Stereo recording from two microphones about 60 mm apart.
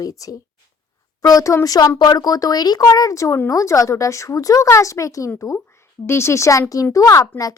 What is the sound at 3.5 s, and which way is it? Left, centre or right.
A woman's voice, left.